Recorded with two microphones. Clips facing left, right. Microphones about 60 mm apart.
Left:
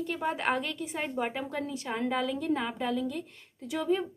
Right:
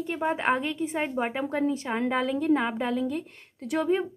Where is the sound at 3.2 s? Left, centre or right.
Right.